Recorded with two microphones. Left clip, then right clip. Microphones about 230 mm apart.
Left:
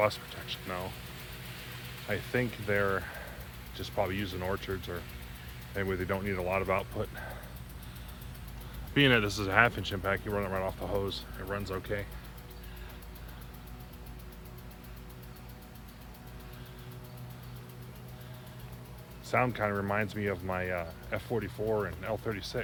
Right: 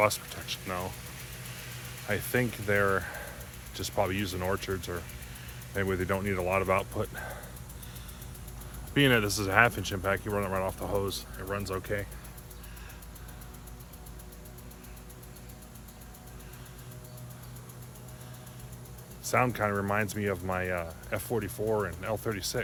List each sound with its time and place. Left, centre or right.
0.0 s speech: right
2.0 s speech: right
8.9 s speech: centre
19.2 s speech: right